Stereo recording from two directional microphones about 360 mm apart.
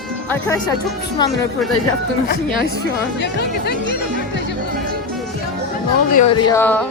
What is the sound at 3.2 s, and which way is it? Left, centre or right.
Speech, left.